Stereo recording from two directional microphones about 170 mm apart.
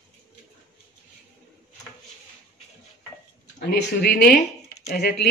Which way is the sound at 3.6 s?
70° left (ahead or behind).